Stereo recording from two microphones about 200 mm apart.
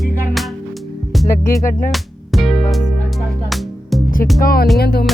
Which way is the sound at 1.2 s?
15° left (ahead or behind).